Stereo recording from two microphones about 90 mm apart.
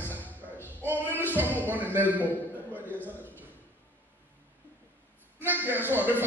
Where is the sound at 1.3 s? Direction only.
20° right (ahead or behind).